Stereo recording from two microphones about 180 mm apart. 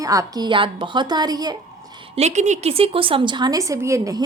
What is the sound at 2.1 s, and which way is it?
A woman's voice, 40° right (ahead or behind).